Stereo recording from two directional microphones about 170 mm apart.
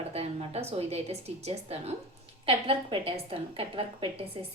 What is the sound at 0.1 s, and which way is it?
A woman's voice, 40° right (ahead or behind).